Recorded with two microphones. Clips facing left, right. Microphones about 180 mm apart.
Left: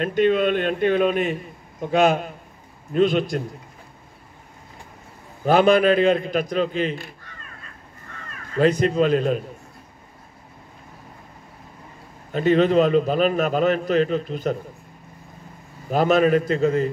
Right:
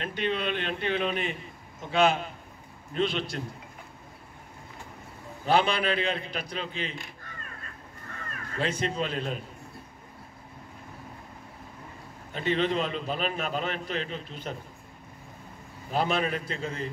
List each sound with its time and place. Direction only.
0.0 s a man's voice: 45° left (ahead or behind)
5.4 s a man's voice: 45° left (ahead or behind)
8.5 s a man's voice: 45° left (ahead or behind)
12.3 s a man's voice: 45° left (ahead or behind)
15.9 s a man's voice: 45° left (ahead or behind)